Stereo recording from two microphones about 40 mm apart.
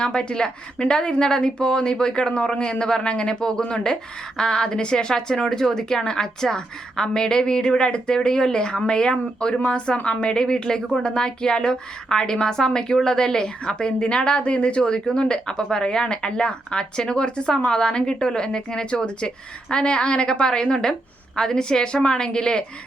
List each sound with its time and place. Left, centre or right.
0.0 s a woman's voice: left